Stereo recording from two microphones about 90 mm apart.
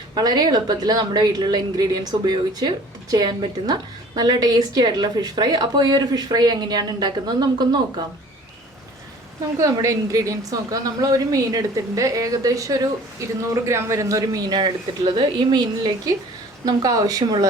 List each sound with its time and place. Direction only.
0.1 s a woman's voice: 50° right (ahead or behind)
9.6 s a woman's voice: 40° right (ahead or behind)